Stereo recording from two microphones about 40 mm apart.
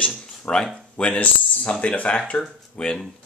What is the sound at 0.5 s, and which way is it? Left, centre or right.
Speech, left.